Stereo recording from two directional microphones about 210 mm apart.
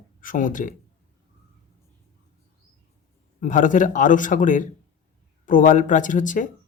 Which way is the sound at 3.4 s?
40° left (ahead or behind).